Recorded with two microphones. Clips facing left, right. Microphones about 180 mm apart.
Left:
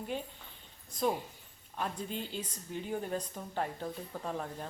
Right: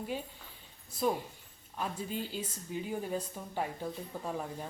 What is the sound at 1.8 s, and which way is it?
Speech, 5° right (ahead or behind).